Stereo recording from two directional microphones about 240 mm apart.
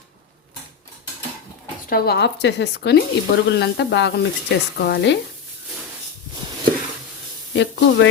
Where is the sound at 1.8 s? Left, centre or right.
Left.